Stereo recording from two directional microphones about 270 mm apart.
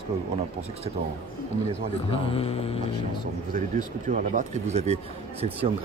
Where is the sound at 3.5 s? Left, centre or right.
Right.